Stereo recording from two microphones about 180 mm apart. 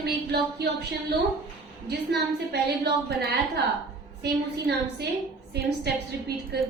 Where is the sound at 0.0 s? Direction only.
65° right (ahead or behind).